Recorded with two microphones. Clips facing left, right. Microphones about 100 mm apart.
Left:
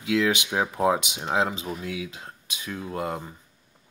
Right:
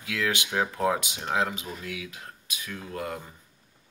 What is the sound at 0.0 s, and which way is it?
Speech, 20° left (ahead or behind).